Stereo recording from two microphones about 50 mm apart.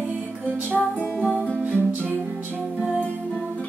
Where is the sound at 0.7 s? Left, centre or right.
Left.